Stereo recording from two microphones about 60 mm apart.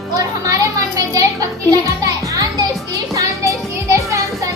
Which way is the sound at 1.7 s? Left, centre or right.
Right.